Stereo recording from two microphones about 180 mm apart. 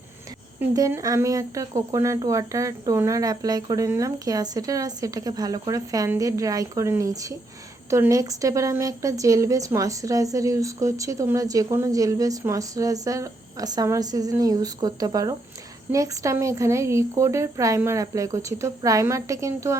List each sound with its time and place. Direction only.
0.6 s a woman's voice: 15° right (ahead or behind)